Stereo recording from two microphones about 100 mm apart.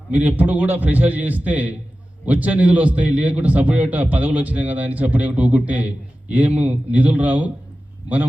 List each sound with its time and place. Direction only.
0.1 s a man's voice: 20° right (ahead or behind)